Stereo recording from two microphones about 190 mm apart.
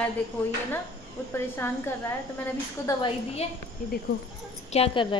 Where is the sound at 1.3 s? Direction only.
10° left (ahead or behind).